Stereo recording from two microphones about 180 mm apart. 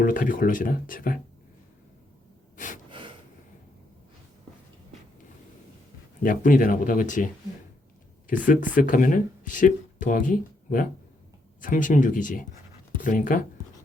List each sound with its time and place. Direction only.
0.0 s speech: 50° left (ahead or behind)
6.2 s speech: 50° left (ahead or behind)
8.3 s speech: 45° left (ahead or behind)